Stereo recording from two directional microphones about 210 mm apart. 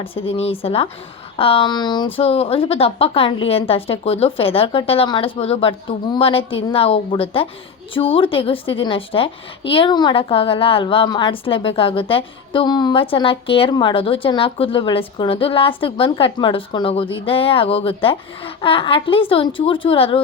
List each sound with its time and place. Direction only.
0.0 s a woman's voice: 25° left (ahead or behind)